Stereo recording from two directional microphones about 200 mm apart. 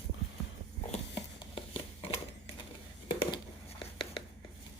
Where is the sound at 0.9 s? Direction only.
25° left (ahead or behind).